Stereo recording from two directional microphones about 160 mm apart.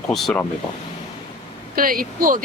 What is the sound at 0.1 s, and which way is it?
Speech, centre (ahead or behind).